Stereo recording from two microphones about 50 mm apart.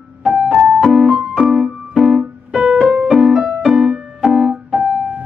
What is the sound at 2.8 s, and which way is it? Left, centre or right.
Music, right.